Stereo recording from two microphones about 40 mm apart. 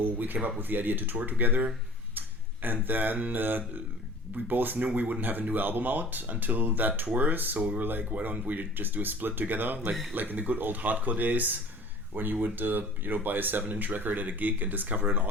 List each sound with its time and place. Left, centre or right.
0.0 s speech: right
2.1 s a sound: right
2.8 s speech: right
4.4 s speech: right